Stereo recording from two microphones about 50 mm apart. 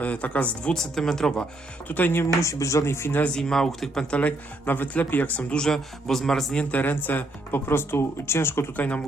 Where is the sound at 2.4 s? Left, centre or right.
Left.